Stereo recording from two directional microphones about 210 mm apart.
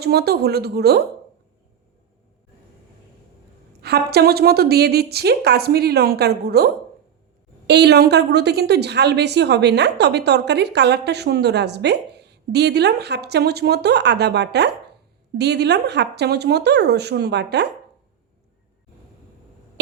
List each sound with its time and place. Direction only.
0.0 s a woman's voice: 50° right (ahead or behind)
3.8 s a woman's voice: 50° right (ahead or behind)
7.7 s a woman's voice: 50° right (ahead or behind)